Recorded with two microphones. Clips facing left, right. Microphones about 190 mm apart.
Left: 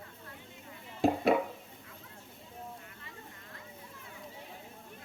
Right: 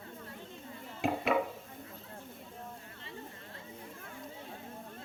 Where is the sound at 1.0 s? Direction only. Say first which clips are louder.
Left 5 dB; 35° left (ahead or behind).